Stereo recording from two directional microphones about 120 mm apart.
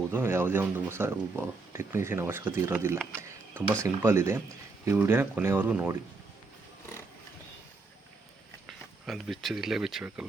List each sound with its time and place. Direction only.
0.1 s speech: 20° right (ahead or behind)
3.2 s a sound: 20° right (ahead or behind)
3.8 s speech: 20° right (ahead or behind)
8.6 s speech: centre (ahead or behind)